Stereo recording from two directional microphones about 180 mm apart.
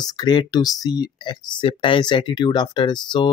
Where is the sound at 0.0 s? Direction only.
20° left (ahead or behind).